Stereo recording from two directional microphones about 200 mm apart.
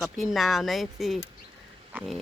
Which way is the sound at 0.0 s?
Centre (ahead or behind).